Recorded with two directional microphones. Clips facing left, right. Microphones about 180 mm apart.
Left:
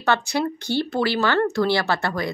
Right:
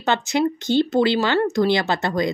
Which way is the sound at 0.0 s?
20° right (ahead or behind).